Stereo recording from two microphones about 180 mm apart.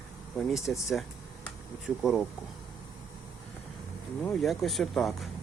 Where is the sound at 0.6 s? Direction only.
15° left (ahead or behind).